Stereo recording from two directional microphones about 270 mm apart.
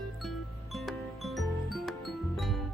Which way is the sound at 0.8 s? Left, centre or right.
Centre.